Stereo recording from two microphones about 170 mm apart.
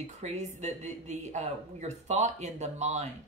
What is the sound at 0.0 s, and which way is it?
A man's voice, 45° right (ahead or behind).